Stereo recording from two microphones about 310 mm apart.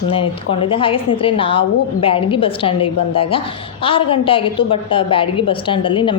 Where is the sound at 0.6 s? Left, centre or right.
Centre.